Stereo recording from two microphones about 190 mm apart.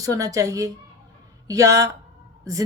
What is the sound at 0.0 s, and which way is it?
A woman's voice, 15° right (ahead or behind).